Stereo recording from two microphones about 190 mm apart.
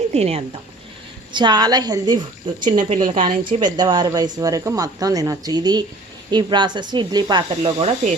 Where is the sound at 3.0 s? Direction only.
45° right (ahead or behind).